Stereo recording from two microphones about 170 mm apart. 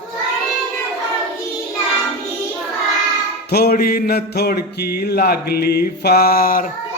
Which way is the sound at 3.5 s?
65° left (ahead or behind).